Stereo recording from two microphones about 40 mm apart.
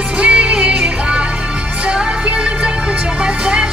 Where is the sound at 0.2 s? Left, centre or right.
Right.